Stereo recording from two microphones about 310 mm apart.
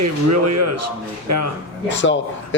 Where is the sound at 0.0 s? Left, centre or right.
Right.